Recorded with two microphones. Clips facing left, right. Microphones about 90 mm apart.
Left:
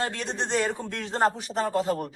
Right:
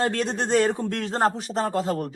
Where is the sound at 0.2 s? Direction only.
45° right (ahead or behind).